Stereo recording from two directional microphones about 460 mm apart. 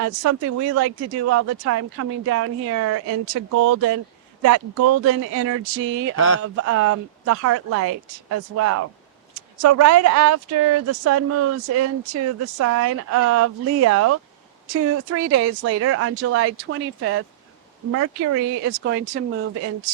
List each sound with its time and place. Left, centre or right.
0.0 s speech: right
6.1 s speech: left
6.4 s speech: right
18.7 s speech: right